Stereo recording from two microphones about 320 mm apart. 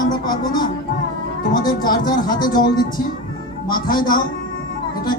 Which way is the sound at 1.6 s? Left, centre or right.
Left.